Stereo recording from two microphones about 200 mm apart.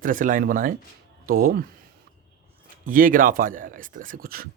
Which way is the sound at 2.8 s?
45° right (ahead or behind).